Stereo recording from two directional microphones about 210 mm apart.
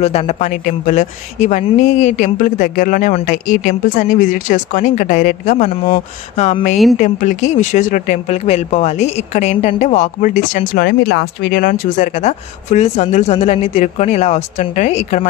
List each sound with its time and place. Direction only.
0.0 s speech: 30° left (ahead or behind)